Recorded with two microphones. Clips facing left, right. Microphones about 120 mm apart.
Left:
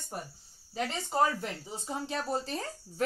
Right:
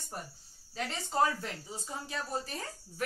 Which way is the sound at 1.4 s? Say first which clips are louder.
Left 3 dB; 20° left (ahead or behind).